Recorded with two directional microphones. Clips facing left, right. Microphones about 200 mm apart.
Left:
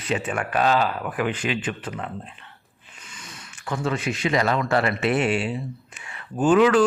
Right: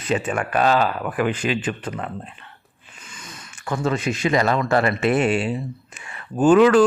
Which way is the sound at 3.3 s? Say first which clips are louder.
Right 3 dB; 45° right (ahead or behind).